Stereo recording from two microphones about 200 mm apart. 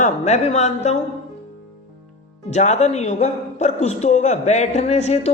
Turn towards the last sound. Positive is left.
turn(degrees=35)  # may be behind; listen again after turning